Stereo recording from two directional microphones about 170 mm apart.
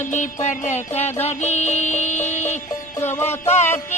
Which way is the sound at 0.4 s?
45° left (ahead or behind).